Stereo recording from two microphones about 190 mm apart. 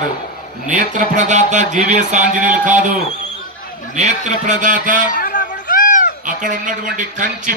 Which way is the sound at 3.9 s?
40° right (ahead or behind).